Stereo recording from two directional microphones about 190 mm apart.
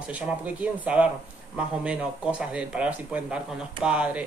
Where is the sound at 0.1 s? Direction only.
10° right (ahead or behind).